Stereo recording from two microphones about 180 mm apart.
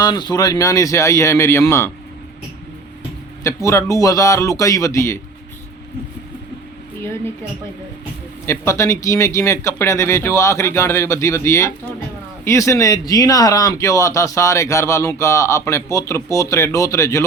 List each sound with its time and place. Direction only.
0.0 s speech: 20° left (ahead or behind)
3.4 s speech: 15° left (ahead or behind)
8.4 s speech: 15° left (ahead or behind)